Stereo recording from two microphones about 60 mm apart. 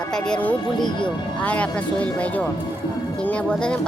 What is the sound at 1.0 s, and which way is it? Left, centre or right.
Speech, left.